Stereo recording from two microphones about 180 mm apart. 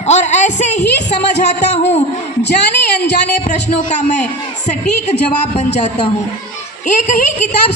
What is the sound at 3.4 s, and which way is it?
A woman's voice, 40° left (ahead or behind).